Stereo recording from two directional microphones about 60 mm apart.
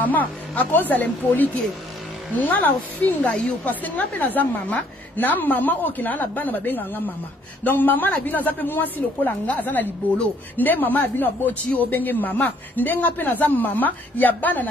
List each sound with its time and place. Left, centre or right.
0.0 s a woman's voice: left